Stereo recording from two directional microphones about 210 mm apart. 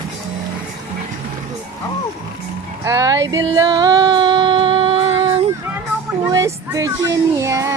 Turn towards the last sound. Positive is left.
turn(degrees=-15)  # may be behind; listen again after turning